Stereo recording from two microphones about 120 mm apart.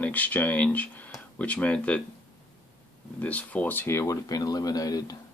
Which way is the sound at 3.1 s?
10° left (ahead or behind).